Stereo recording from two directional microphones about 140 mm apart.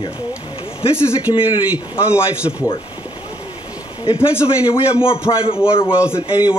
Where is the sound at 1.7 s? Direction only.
10° right (ahead or behind).